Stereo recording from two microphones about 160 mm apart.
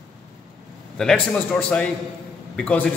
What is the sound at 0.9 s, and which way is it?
A man's voice, centre (ahead or behind).